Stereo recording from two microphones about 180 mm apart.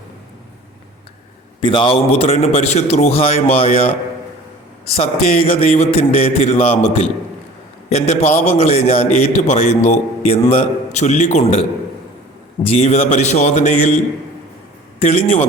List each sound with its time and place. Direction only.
1.6 s a man's voice: 25° left (ahead or behind)
4.9 s a man's voice: 30° left (ahead or behind)
12.6 s a man's voice: 35° left (ahead or behind)
14.9 s a man's voice: 40° left (ahead or behind)